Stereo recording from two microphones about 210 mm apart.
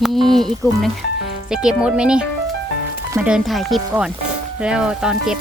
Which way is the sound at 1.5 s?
5° right (ahead or behind).